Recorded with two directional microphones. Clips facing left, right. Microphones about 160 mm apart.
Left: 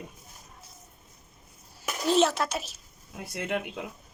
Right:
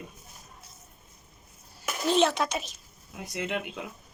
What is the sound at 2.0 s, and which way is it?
A woman's voice, 5° left (ahead or behind).